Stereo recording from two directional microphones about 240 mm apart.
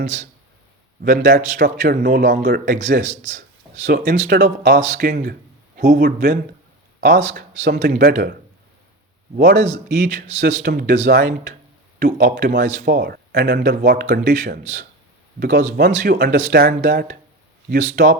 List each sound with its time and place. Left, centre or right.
1.0 s speech: right
9.4 s speech: right